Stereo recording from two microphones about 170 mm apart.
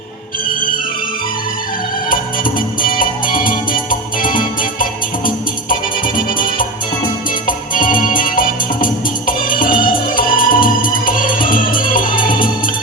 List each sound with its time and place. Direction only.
2.0 s music: 55° left (ahead or behind)